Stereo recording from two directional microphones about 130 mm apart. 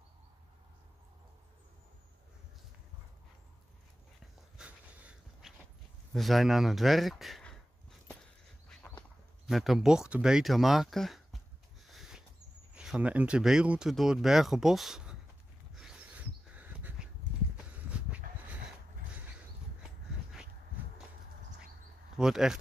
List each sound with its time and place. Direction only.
4.6 s dog: 10° right (ahead or behind)
6.1 s speech: centre (ahead or behind)
9.5 s speech: centre (ahead or behind)
11.9 s rodents: centre (ahead or behind)
12.7 s speech: 5° right (ahead or behind)
15.7 s a sound: 5° right (ahead or behind)
22.1 s speech: 5° right (ahead or behind)